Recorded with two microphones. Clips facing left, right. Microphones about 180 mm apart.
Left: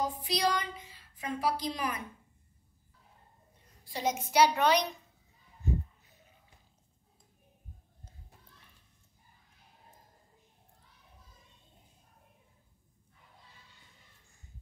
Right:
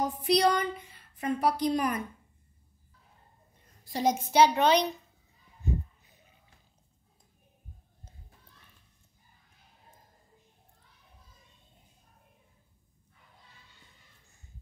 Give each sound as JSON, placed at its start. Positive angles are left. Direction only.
{"t": 0.0, "sound": "a woman's voice", "side_deg": -60}
{"t": 3.9, "sound": "a woman's voice", "side_deg": -35}